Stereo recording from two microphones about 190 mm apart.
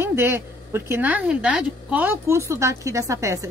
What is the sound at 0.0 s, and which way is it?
Speech, 10° right (ahead or behind).